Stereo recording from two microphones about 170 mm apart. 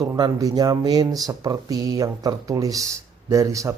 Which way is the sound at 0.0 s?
20° right (ahead or behind).